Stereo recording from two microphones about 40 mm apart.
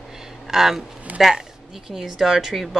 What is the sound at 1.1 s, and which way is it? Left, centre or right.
Speech, right.